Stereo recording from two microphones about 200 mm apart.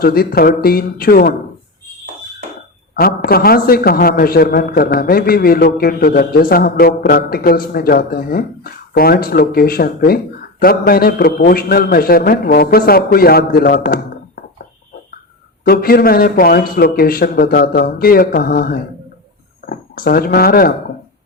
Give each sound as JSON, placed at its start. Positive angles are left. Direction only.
{"t": 0.0, "sound": "a man's voice", "side_deg": 50}
{"t": 2.9, "sound": "a man's voice", "side_deg": 50}
{"t": 15.6, "sound": "a man's voice", "side_deg": 50}